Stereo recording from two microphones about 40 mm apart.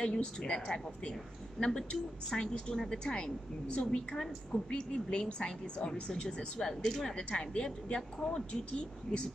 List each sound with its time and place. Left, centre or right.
0.0 s a woman's voice: left